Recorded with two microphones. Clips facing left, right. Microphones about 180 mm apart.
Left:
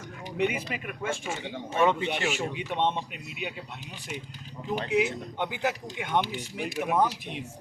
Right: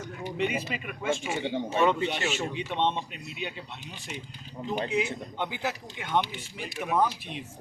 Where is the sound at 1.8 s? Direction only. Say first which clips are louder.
Left 1 dB; 20° left (ahead or behind).